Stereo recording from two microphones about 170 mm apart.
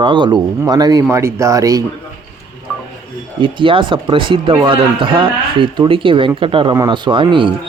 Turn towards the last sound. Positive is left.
turn(degrees=-30)  # may be behind; listen again after turning